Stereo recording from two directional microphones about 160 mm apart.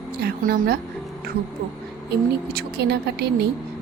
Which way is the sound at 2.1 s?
80° right.